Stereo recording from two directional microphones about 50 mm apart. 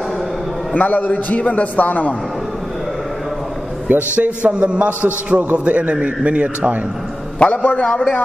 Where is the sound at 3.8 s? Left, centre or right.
Right.